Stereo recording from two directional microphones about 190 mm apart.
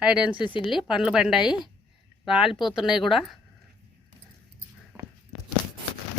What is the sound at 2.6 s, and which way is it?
Speech, 5° right (ahead or behind).